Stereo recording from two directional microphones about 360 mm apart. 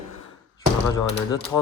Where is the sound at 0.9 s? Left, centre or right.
Centre.